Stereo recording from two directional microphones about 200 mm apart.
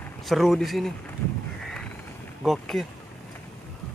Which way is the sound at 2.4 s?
Centre (ahead or behind).